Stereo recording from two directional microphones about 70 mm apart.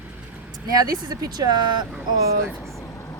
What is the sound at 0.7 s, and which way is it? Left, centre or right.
Speech, right.